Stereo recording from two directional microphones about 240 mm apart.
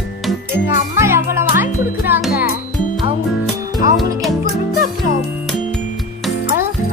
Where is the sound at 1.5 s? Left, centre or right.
Centre.